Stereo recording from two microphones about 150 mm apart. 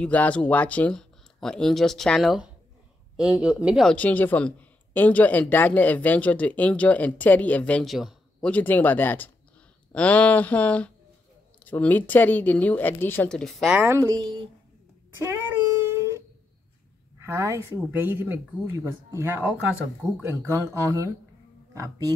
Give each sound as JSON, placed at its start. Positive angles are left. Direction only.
{"t": 0.0, "sound": "speech", "side_deg": 10}
{"t": 3.9, "sound": "speech", "side_deg": 10}
{"t": 13.7, "sound": "a woman's voice", "side_deg": -15}
{"t": 14.0, "sound": "a woman's voice", "side_deg": -30}
{"t": 15.2, "sound": "a sound", "side_deg": -20}
{"t": 17.2, "sound": "a woman's voice", "side_deg": -20}